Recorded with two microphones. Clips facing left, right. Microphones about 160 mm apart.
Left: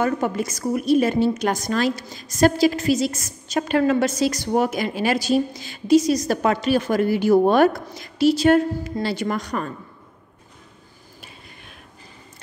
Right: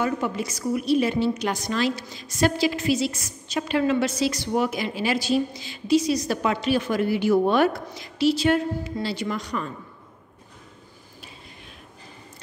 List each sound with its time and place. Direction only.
0.0 s a woman's voice: 45° left (ahead or behind)